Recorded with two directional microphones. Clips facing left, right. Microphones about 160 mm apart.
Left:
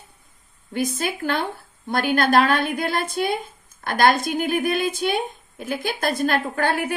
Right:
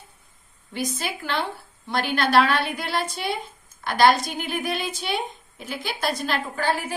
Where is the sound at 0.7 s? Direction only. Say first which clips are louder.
Left 5 dB; 50° left (ahead or behind).